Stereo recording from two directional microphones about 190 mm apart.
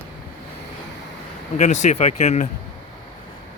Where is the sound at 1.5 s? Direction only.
40° left (ahead or behind).